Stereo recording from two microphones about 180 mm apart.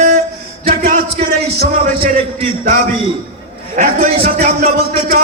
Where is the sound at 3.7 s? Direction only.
45° right (ahead or behind).